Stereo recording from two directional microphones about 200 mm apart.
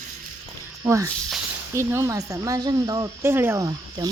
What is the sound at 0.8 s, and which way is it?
Speech, 15° right (ahead or behind).